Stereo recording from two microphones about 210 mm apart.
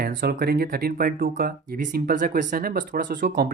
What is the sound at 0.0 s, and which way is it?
Speech, 45° right (ahead or behind).